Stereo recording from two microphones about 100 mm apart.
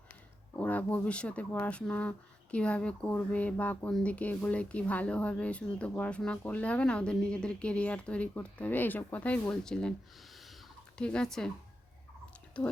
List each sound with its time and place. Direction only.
0.5 s a woman's voice: 15° left (ahead or behind)
10.9 s a woman's voice: 10° left (ahead or behind)
12.6 s a woman's voice: 10° left (ahead or behind)